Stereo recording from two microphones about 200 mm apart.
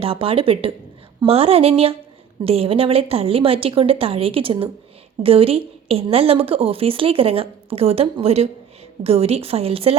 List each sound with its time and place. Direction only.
0.0 s a woman's voice: 30° right (ahead or behind)